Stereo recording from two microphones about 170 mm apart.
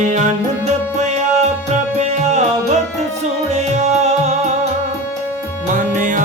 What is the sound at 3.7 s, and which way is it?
Music, 40° right (ahead or behind).